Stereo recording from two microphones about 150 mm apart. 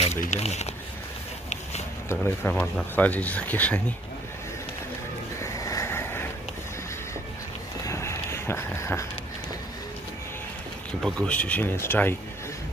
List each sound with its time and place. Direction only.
0.2 s speech: 50° left (ahead or behind)
2.0 s speech: 15° left (ahead or behind)
5.4 s vehicle: 20° left (ahead or behind)
7.8 s a sound: 20° left (ahead or behind)
11.0 s speech: 5° left (ahead or behind)